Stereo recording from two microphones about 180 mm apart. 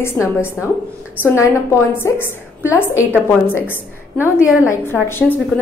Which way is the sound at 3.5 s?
10° left (ahead or behind).